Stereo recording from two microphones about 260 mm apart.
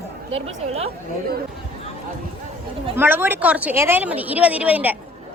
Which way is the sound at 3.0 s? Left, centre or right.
Centre.